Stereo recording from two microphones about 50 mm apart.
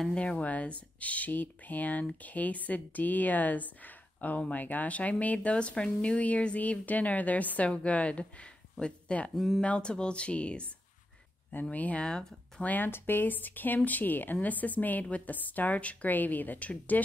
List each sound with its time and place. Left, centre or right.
0.1 s a woman's voice: left
11.7 s speech: left
12.6 s a woman's voice: left
12.9 s a woman's voice: left